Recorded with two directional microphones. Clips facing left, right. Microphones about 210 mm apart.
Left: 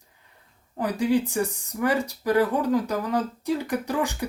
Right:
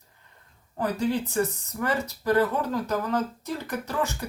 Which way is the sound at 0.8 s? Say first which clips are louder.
Left 3 dB; 15° left (ahead or behind).